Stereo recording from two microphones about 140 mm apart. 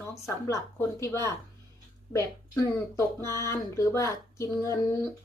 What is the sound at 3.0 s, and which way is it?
Speech, 20° left (ahead or behind).